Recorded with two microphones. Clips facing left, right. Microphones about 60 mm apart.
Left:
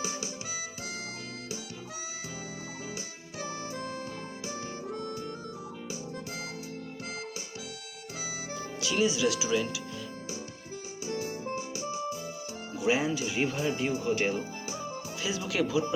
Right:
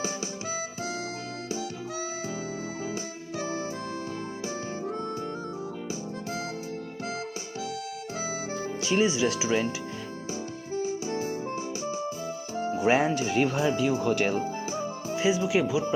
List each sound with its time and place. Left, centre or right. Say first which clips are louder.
8.8 s speech: right 2 dB; right
10.8 s music: right 6 dB; right
12.9 s speech: right 3 dB; right
14.3 s music: right 6 dB; right
15.4 s speech: right 4 dB; centre